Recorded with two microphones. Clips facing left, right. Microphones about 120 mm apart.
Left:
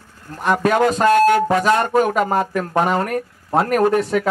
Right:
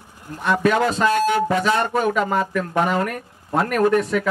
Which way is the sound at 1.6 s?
40° left (ahead or behind).